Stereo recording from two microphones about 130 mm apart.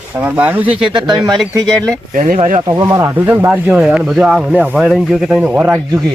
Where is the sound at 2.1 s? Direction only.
90° right.